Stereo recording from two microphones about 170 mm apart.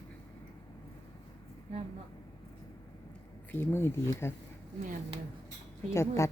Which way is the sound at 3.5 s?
10° left (ahead or behind).